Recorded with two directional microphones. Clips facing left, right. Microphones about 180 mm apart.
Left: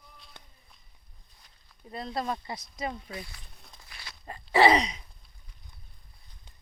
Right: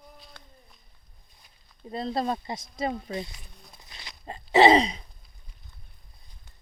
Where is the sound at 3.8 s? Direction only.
20° right (ahead or behind).